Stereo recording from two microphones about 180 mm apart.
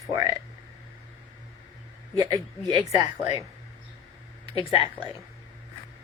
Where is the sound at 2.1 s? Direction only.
20° right (ahead or behind).